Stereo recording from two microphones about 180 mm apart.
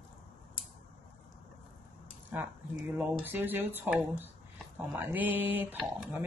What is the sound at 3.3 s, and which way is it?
Speech, 10° right (ahead or behind).